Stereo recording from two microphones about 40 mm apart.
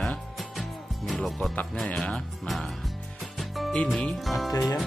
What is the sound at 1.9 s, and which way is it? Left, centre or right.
Speech, left.